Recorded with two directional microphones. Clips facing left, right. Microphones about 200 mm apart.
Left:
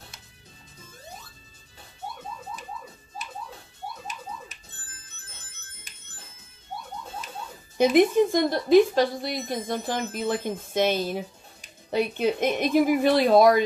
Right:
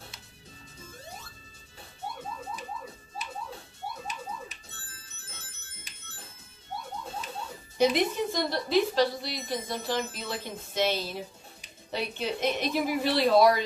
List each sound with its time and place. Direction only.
7.7 s a woman's voice: 50° left (ahead or behind)